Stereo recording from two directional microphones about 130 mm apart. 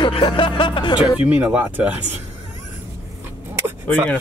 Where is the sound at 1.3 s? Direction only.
10° right (ahead or behind).